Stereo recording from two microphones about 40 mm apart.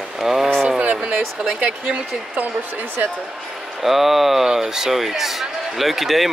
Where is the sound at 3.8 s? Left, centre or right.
Centre.